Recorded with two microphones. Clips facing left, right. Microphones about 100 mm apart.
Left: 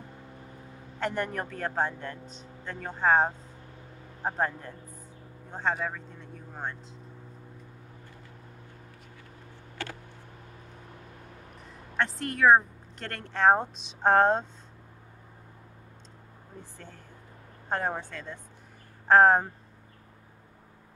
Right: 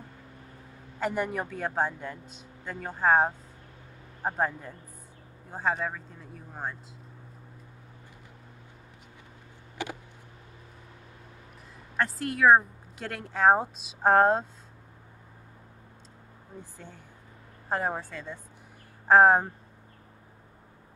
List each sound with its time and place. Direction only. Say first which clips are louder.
0.9 s a man's voice: right 1 dB; 5° right (ahead or behind)
9.8 s a sound: right 3 dB; 15° right (ahead or behind)
12.0 s speech: even; centre (ahead or behind)
16.7 s a man's voice: even; 10° right (ahead or behind)